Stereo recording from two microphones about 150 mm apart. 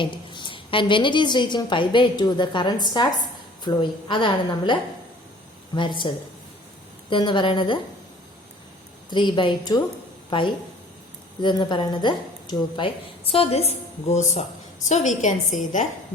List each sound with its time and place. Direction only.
0.0 s a woman's voice: 30° left (ahead or behind)
7.1 s a woman's voice: 30° left (ahead or behind)
9.0 s a woman's voice: 30° left (ahead or behind); by 15.9 s 55° left (ahead or behind)